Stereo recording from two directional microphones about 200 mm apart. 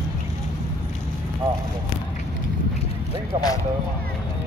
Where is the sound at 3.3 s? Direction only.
20° right (ahead or behind).